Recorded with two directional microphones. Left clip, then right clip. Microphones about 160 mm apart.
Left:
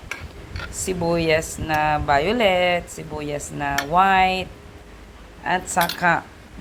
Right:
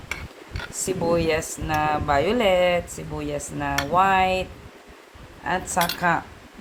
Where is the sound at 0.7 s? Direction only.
20° left (ahead or behind).